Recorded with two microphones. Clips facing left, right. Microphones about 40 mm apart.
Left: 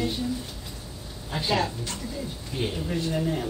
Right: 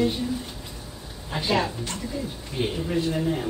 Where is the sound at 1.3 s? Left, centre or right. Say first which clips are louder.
Right 2 dB; centre.